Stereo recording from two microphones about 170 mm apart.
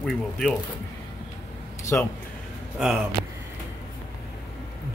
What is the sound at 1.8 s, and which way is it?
Speech, 15° left (ahead or behind).